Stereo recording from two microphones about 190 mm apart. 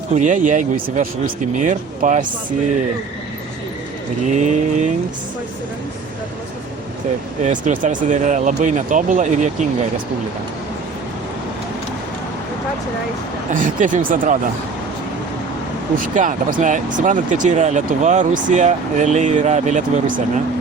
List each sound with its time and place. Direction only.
0.2 s speech: 40° right (ahead or behind)
4.4 s speech: 40° right (ahead or behind)
7.4 s speech: 40° right (ahead or behind)
13.5 s speech: 45° right (ahead or behind)
16.0 s speech: 45° right (ahead or behind)